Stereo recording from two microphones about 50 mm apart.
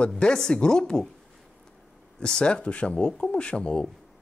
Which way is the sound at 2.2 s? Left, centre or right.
Centre.